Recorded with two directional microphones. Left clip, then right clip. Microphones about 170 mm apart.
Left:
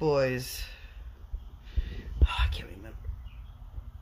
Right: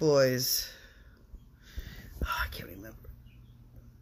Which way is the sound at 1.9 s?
10° left (ahead or behind).